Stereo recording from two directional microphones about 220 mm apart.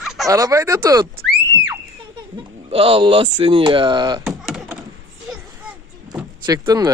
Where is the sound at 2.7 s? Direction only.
25° right (ahead or behind).